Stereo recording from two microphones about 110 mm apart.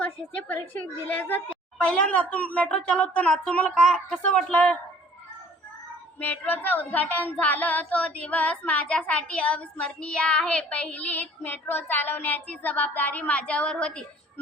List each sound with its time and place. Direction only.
0.0 s child singing: 15° left (ahead or behind)
6.1 s child singing: 15° left (ahead or behind)